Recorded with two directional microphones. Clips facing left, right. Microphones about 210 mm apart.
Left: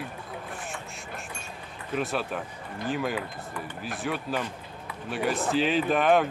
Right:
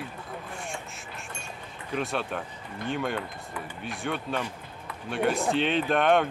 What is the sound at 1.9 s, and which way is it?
Speech, centre (ahead or behind).